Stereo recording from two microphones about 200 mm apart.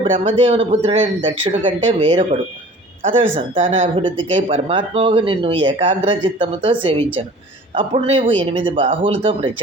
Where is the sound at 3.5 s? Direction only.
25° right (ahead or behind).